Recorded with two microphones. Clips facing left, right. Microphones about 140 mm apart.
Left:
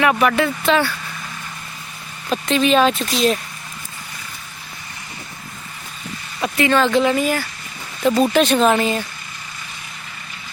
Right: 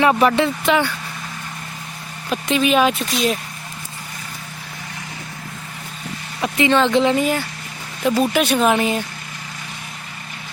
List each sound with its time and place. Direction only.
0.0 s speech: 25° right (ahead or behind)
2.3 s speech: 10° right (ahead or behind)
6.4 s speech: 20° right (ahead or behind)
8.0 s speech: 10° right (ahead or behind)